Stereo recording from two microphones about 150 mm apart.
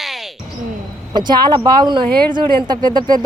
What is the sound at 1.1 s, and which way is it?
A woman's voice, 30° right (ahead or behind).